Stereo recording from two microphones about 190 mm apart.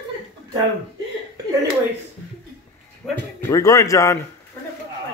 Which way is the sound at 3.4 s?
15° left (ahead or behind).